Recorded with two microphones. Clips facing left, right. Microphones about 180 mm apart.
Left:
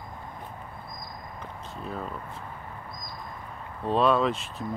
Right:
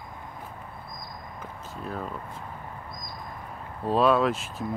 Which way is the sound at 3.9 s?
5° right (ahead or behind).